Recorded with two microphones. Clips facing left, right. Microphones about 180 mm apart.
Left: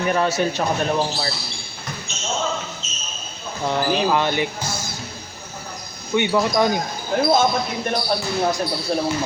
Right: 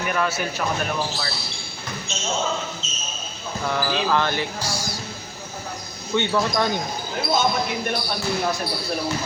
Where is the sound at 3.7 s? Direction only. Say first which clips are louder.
Left 3 dB; 20° left (ahead or behind).